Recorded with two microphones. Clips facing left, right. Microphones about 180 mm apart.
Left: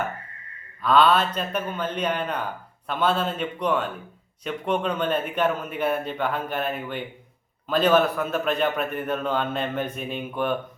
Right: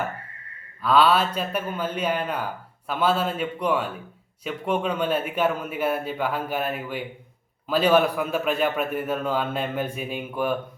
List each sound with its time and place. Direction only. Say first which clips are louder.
0.8 s a man's voice: even; 5° right (ahead or behind)